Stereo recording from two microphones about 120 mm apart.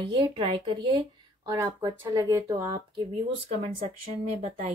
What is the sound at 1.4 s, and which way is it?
Speech, 30° right (ahead or behind).